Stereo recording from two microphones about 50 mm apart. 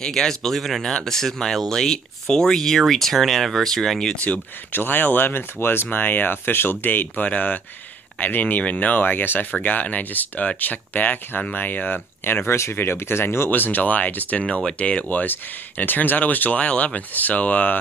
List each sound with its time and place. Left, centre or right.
0.0 s speech: centre
4.1 s speech: left
4.7 s speech: left
5.9 s speech: left
13.5 s speech: left